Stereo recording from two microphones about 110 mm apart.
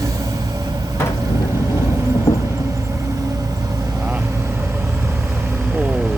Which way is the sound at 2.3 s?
30° left (ahead or behind).